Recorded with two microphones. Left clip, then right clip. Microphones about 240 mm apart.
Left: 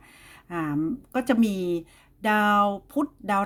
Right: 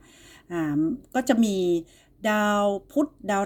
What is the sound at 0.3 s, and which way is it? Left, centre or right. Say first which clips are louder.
Speech: right 1 dB; left.